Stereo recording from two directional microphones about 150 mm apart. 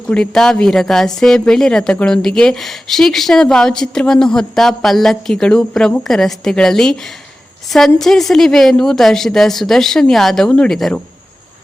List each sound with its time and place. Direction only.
0.1 s a woman's voice: 5° left (ahead or behind)